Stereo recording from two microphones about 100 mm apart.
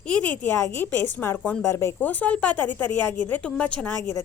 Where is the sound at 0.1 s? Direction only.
15° left (ahead or behind).